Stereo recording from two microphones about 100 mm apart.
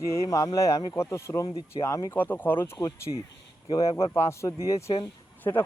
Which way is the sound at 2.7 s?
35° left (ahead or behind).